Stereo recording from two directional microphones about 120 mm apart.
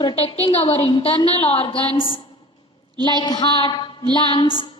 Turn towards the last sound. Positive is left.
turn(degrees=45)  # may be behind; listen again after turning